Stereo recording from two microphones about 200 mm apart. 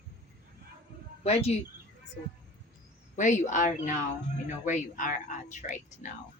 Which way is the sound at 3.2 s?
40° left (ahead or behind).